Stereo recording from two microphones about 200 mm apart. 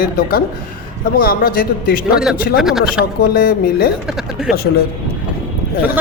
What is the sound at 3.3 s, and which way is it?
Speech, 45° left (ahead or behind).